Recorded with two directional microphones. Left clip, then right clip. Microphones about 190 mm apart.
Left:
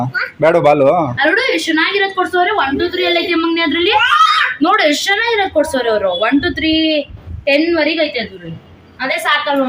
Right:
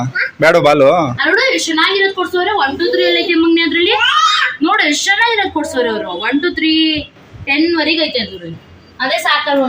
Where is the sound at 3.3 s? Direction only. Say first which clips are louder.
Right 3 dB; 70° left (ahead or behind).